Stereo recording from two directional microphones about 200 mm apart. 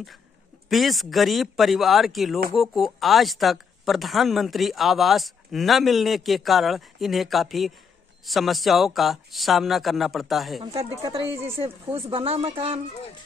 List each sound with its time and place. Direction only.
0.7 s speech: centre (ahead or behind)
10.6 s speech: 20° right (ahead or behind)